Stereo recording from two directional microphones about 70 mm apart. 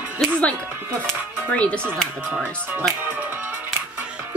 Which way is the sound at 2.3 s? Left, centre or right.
Right.